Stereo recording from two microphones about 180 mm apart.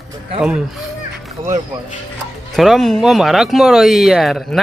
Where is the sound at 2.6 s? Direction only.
Centre (ahead or behind).